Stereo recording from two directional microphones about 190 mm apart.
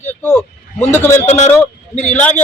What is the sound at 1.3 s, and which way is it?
Speech, 40° left (ahead or behind).